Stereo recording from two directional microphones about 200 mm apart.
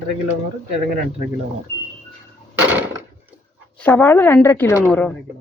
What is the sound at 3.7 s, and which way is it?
A woman's voice, 10° left (ahead or behind).